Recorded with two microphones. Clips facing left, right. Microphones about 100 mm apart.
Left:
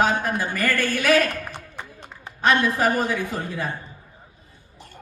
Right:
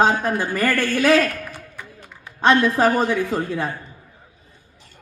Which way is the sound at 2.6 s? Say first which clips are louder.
Right 4 dB; 30° right (ahead or behind).